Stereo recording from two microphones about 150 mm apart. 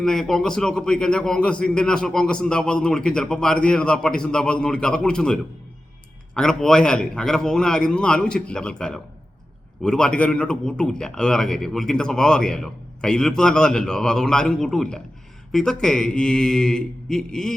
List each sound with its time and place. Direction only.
0.0 s a man's voice: 5° left (ahead or behind)